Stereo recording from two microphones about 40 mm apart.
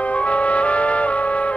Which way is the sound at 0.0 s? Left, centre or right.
Left.